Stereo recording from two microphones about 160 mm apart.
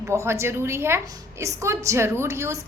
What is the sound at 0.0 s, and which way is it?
A woman's voice, 15° right (ahead or behind).